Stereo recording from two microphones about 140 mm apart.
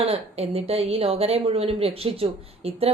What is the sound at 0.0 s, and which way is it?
A woman's voice, 45° right (ahead or behind).